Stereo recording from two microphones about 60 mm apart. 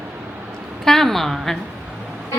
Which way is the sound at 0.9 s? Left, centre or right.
Centre.